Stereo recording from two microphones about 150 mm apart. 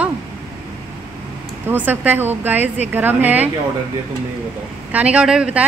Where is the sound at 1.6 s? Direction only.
10° right (ahead or behind).